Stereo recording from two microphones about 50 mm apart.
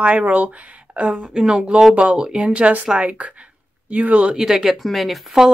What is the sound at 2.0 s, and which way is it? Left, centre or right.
A woman's voice, right.